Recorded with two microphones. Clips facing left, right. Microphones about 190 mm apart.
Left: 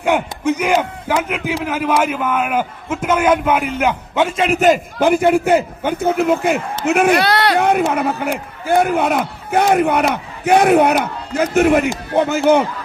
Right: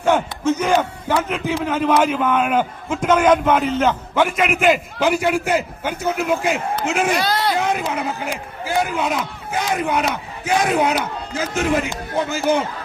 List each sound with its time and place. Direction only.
0.0 s a man's voice: 15° left (ahead or behind); by 12.6 s 60° left (ahead or behind)